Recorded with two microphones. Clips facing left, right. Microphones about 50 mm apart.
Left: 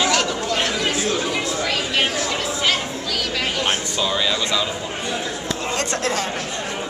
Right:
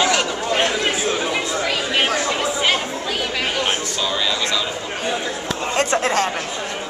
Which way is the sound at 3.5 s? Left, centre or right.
Centre.